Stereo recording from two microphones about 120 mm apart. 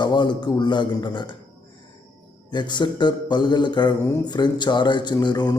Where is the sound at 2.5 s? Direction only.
40° left (ahead or behind).